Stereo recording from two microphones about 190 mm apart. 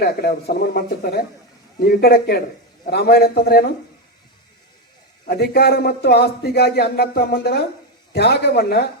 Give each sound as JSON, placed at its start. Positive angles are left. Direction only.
{"t": 0.0, "sound": "speech", "side_deg": 55}
{"t": 5.2, "sound": "speech", "side_deg": 55}